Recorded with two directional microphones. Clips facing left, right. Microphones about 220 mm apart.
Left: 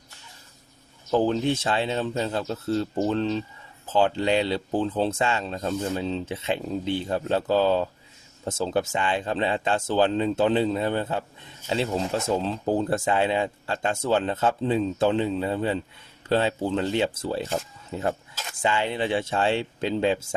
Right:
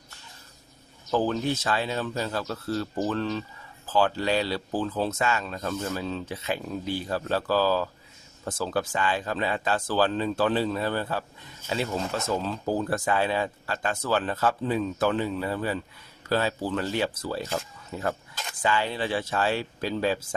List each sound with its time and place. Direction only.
1.1 s speech: 20° left (ahead or behind)